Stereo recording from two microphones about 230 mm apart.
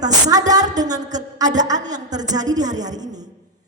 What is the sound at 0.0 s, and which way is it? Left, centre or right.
A woman's voice, centre.